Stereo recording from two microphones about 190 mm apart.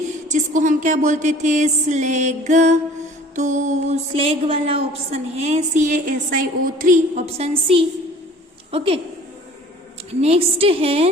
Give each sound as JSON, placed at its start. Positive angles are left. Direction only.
{"t": 0.3, "sound": "music", "side_deg": -40}
{"t": 8.7, "sound": "a woman's voice", "side_deg": -30}
{"t": 10.2, "sound": "music", "side_deg": -30}